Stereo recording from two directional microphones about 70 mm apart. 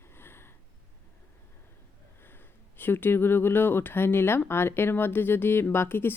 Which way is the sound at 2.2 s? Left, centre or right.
Left.